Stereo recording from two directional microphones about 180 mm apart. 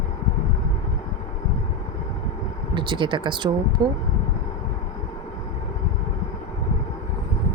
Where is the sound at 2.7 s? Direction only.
25° right (ahead or behind).